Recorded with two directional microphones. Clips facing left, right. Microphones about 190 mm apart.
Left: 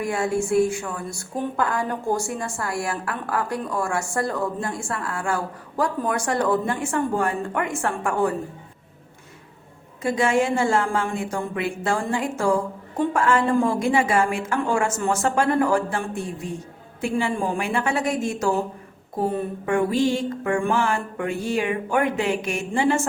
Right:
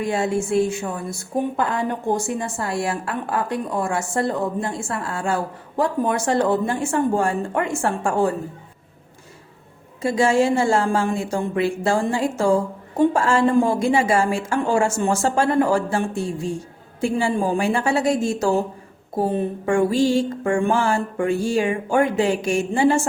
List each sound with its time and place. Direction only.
0.0 s a woman's voice: 25° right (ahead or behind)
10.0 s a woman's voice: 30° right (ahead or behind)
17.0 s music: 30° right (ahead or behind)